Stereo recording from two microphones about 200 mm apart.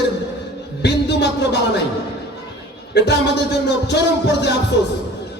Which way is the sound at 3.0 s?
55° left (ahead or behind).